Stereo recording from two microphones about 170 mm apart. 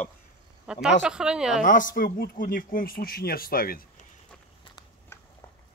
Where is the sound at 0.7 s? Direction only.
Centre (ahead or behind).